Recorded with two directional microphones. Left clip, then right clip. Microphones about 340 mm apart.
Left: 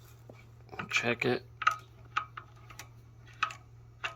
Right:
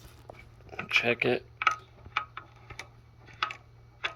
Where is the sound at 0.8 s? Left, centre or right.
Centre.